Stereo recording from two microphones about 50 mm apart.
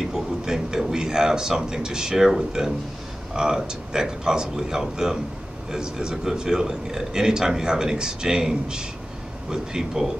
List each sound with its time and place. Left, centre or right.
0.1 s a man's voice: centre